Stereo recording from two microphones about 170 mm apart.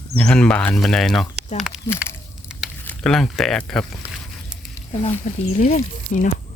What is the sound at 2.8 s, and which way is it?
Speech, 5° left (ahead or behind).